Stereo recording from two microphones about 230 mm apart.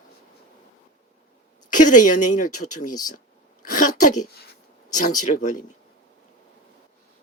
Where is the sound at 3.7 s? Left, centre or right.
Left.